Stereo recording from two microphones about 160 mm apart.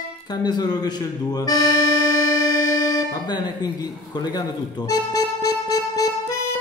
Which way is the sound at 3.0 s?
25° left (ahead or behind).